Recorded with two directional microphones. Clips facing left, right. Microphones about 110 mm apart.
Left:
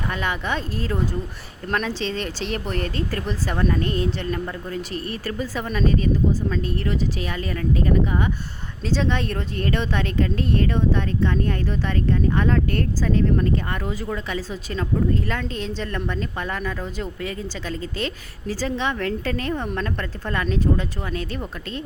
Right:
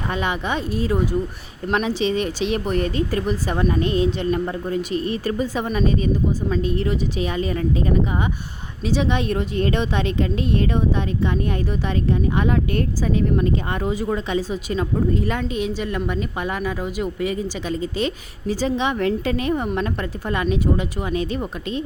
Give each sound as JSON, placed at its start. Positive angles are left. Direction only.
{"t": 0.1, "sound": "speech", "side_deg": -20}